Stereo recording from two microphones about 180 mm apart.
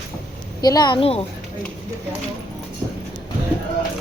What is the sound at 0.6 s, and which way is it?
Speech, 20° left (ahead or behind).